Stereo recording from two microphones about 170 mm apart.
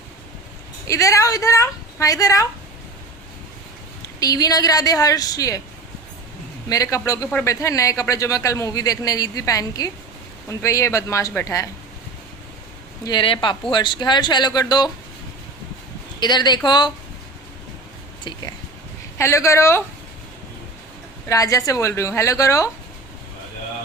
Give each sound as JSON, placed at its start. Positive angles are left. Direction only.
{"t": 0.9, "sound": "speech", "side_deg": 20}
{"t": 4.2, "sound": "speech", "side_deg": 20}
{"t": 6.7, "sound": "speech", "side_deg": 20}
{"t": 13.1, "sound": "speech", "side_deg": 30}
{"t": 16.2, "sound": "speech", "side_deg": 25}
{"t": 19.2, "sound": "speech", "side_deg": 15}
{"t": 21.2, "sound": "speech", "side_deg": 20}